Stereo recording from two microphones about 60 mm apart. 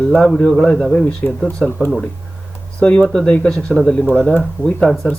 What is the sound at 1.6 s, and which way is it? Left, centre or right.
Speech, centre.